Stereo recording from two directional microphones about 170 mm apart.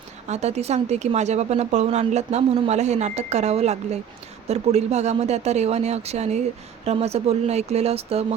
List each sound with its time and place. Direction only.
0.3 s speech: 40° right (ahead or behind)